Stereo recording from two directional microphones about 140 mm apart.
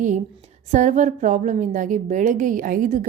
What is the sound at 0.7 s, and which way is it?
A woman's voice, 60° right (ahead or behind).